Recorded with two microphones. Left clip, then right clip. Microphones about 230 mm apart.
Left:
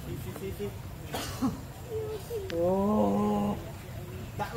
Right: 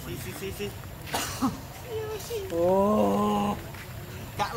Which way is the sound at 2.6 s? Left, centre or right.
Centre.